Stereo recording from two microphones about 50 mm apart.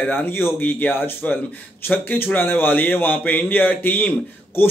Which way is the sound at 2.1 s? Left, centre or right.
Left.